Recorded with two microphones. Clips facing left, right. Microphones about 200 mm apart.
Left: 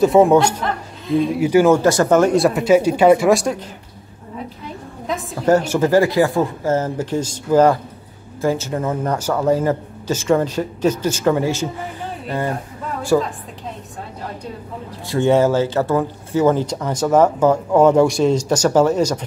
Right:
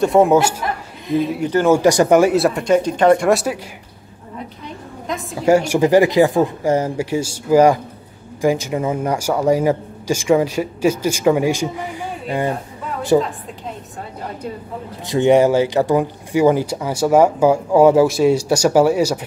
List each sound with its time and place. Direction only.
0.0 s speech: centre (ahead or behind)
1.7 s speech: 15° right (ahead or behind)
5.0 s a woman's voice: centre (ahead or behind)
5.4 s a man's voice: 10° right (ahead or behind)
15.0 s a man's voice: 15° right (ahead or behind)